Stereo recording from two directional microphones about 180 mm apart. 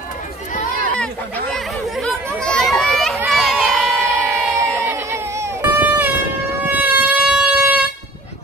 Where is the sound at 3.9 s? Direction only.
15° right (ahead or behind).